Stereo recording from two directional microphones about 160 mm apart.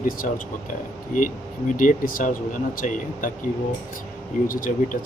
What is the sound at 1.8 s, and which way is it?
Speech, 60° left (ahead or behind).